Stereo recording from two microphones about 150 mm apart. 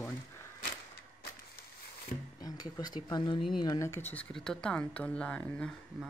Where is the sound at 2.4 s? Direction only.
25° left (ahead or behind).